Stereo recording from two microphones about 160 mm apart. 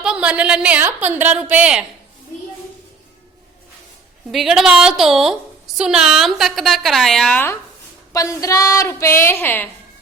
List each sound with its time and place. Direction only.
0.0 s a woman's voice: 5° right (ahead or behind)
4.3 s a woman's voice: centre (ahead or behind)
8.1 s a sound: 20° left (ahead or behind)
9.2 s a woman's voice: 15° left (ahead or behind)